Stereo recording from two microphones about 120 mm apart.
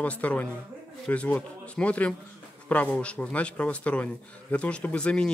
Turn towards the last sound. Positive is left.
turn(degrees=10)  # may be behind; listen again after turning